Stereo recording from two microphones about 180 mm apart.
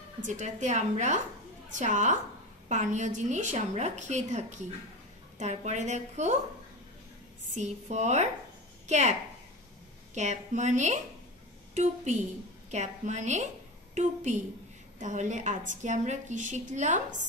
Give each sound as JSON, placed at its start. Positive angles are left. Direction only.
{"t": 0.2, "sound": "a woman's voice", "side_deg": -40}
{"t": 7.5, "sound": "a woman's voice", "side_deg": -40}
{"t": 10.1, "sound": "a woman's voice", "side_deg": -40}